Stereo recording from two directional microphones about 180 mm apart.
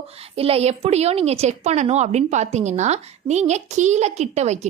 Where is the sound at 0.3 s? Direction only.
35° right (ahead or behind).